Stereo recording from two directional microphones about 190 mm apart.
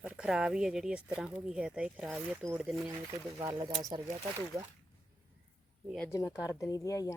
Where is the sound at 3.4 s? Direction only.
20° right (ahead or behind).